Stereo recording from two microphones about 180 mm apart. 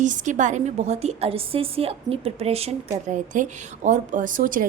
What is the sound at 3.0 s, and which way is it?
A woman's voice, 45° right (ahead or behind).